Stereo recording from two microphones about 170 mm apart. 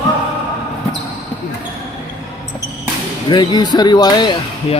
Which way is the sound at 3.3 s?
25° left (ahead or behind).